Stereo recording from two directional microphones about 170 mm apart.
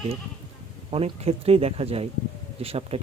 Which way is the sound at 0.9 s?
35° right (ahead or behind).